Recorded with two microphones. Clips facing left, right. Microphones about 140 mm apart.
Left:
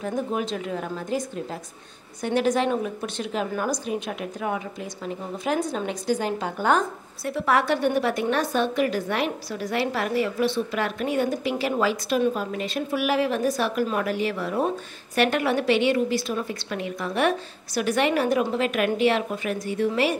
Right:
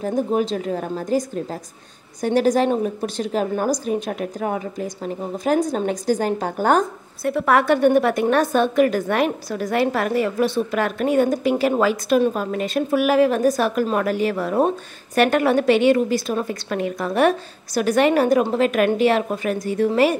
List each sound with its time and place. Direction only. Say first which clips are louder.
0.0 s a woman's voice: right 6 dB; 35° right (ahead or behind)
7.2 s a woman's voice: right 5 dB; 55° right (ahead or behind)